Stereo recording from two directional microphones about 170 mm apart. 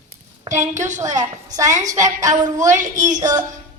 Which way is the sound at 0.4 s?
45° right (ahead or behind).